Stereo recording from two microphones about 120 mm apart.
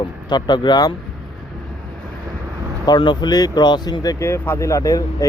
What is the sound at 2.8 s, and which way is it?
Speech, 40° left (ahead or behind).